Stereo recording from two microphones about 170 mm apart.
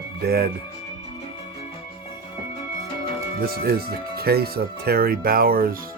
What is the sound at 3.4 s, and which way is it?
Speech, 65° right (ahead or behind).